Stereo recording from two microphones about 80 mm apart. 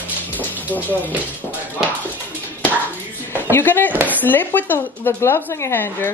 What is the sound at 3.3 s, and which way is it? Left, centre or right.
A woman's voice, left.